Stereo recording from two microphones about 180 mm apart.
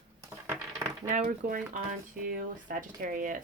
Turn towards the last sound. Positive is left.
turn(degrees=-50)  # may be behind; listen again after turning